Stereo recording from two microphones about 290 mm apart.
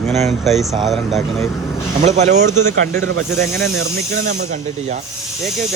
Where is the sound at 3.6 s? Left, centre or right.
Right.